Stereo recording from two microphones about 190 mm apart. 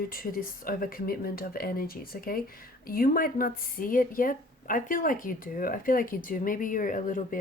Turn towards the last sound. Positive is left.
turn(degrees=45)  # may be behind; listen again after turning